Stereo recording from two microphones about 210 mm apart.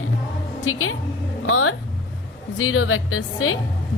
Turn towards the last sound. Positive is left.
turn(degrees=75)  # may be behind; listen again after turning